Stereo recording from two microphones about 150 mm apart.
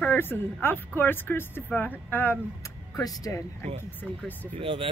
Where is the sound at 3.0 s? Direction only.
25° left (ahead or behind).